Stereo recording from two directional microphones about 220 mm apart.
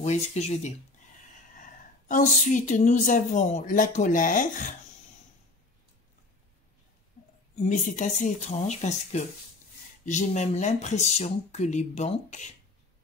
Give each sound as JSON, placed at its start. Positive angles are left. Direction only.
{"t": 0.0, "sound": "a woman's voice", "side_deg": 30}
{"t": 7.2, "sound": "a sound", "side_deg": 35}
{"t": 7.5, "sound": "a woman's voice", "side_deg": 35}